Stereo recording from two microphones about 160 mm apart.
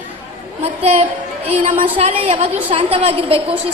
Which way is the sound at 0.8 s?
40° right (ahead or behind).